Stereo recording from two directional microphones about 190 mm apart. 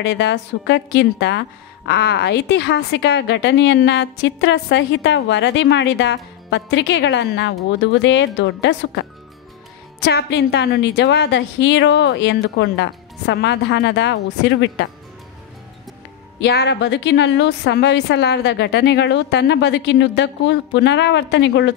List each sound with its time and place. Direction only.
0.0 s a woman's voice: 65° left (ahead or behind)
10.0 s a woman's voice: 60° left (ahead or behind)
16.3 s a woman's voice: 60° left (ahead or behind)